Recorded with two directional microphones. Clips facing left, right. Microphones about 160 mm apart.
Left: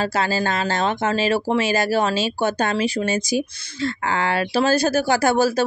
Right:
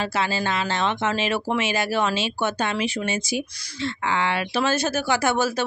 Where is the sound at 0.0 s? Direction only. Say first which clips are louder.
Left 3 dB; 40° left (ahead or behind).